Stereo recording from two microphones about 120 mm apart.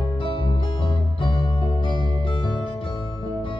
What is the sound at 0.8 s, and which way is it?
Music, 45° left (ahead or behind).